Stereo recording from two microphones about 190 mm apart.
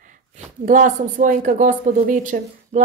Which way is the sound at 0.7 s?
45° right (ahead or behind).